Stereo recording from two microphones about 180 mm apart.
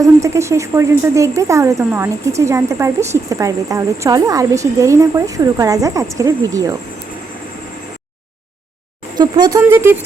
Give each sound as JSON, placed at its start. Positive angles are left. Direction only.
{"t": 0.0, "sound": "speech", "side_deg": -15}
{"t": 9.1, "sound": "speech", "side_deg": -25}
{"t": 9.6, "sound": "speech", "side_deg": -15}